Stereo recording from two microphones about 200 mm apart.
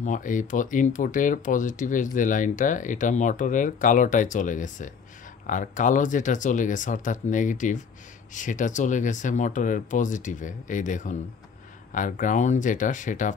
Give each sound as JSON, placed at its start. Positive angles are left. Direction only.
{"t": 0.0, "sound": "speech", "side_deg": 40}